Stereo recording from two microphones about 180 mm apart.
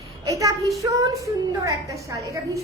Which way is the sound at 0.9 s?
20° right (ahead or behind).